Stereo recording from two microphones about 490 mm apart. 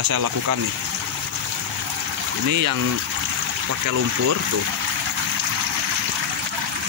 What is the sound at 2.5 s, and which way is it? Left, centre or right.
Speech, right.